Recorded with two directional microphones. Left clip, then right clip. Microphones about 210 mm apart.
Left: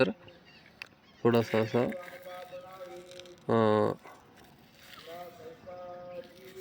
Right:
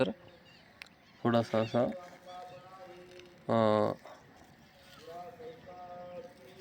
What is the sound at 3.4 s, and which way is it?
Speech, 15° left (ahead or behind).